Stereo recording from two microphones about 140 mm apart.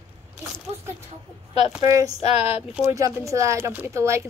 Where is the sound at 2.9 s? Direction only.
25° right (ahead or behind).